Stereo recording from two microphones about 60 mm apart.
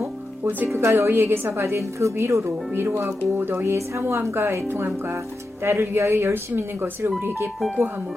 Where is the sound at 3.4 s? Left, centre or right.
Right.